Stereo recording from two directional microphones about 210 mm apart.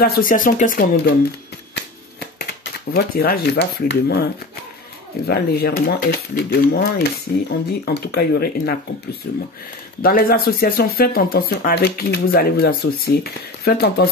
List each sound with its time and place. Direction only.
0.0 s speech: 45° left (ahead or behind)
2.3 s speech: 50° left (ahead or behind)
5.3 s speech: 50° left (ahead or behind)